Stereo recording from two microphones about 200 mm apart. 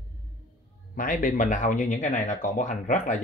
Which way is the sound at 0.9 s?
40° left (ahead or behind).